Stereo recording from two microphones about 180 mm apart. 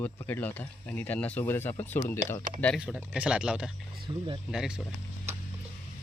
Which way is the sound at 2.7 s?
5° right (ahead or behind).